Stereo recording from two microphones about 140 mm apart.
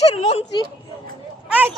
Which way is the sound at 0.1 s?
45° left (ahead or behind).